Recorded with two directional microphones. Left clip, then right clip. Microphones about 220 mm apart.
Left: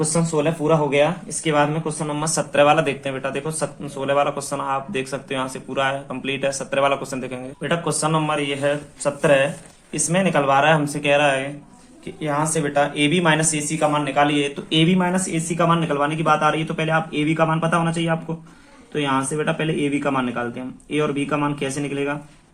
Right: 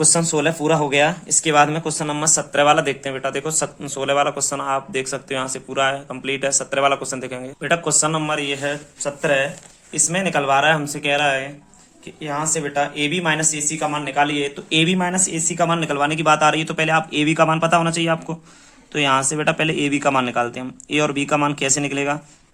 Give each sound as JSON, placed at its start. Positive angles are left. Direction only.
{"t": 0.0, "sound": "speech", "side_deg": -45}
{"t": 2.2, "sound": "speech", "side_deg": -25}
{"t": 9.0, "sound": "speech", "side_deg": -5}
{"t": 16.0, "sound": "a man's voice", "side_deg": -45}